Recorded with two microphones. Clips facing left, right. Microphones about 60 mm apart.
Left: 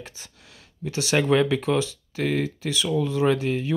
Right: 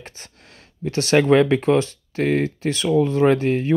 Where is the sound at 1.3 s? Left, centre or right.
Right.